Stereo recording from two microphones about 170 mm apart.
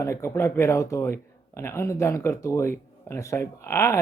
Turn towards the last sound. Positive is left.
turn(degrees=15)  # may be behind; listen again after turning